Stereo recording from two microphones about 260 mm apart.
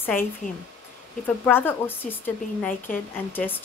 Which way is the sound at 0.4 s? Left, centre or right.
Left.